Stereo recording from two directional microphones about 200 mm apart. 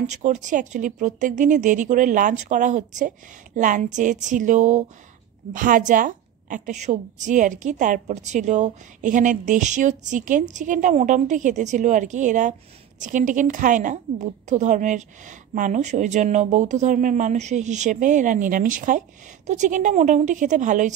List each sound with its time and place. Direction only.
0.1 s a woman's voice: 40° right (ahead or behind)